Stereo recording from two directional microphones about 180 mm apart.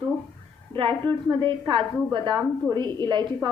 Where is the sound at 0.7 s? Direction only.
30° right (ahead or behind).